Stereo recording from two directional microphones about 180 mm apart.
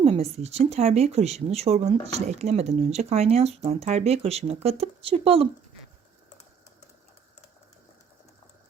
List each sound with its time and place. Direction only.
0.0 s speech: 35° right (ahead or behind)